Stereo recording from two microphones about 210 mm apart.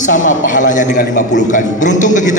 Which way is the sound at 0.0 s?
35° left (ahead or behind).